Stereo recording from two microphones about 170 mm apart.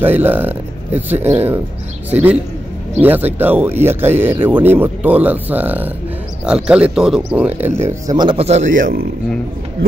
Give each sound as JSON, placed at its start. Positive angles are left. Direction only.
{"t": 0.0, "sound": "speech", "side_deg": -10}
{"t": 3.0, "sound": "speech", "side_deg": -10}
{"t": 8.2, "sound": "a man's voice", "side_deg": -35}